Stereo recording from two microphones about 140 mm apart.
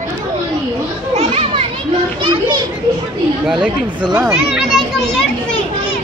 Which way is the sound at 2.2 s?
35° right (ahead or behind).